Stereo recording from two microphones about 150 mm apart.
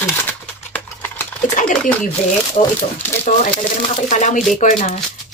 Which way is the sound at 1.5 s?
60° left (ahead or behind).